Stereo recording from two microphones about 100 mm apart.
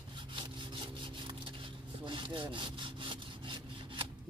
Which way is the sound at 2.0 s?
55° right (ahead or behind).